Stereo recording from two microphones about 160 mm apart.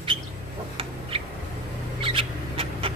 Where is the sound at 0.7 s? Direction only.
35° right (ahead or behind).